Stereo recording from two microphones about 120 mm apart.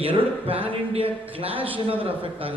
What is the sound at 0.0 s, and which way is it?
Speech, 50° right (ahead or behind).